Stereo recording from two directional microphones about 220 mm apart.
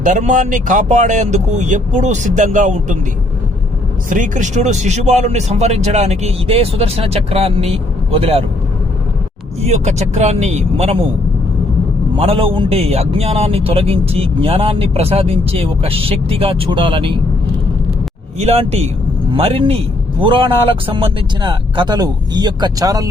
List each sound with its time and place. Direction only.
0.0 s speech: 35° right (ahead or behind)
4.1 s a man's voice: 35° right (ahead or behind)
9.6 s a man's voice: 30° right (ahead or behind)
12.1 s a man's voice: 25° right (ahead or behind)
18.3 s a man's voice: 30° right (ahead or behind)